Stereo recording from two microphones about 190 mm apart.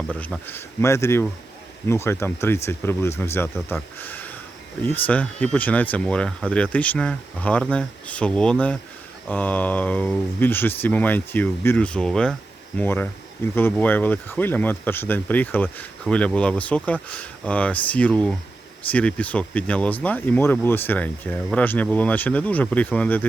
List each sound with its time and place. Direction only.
0.1 s speech: 10° left (ahead or behind)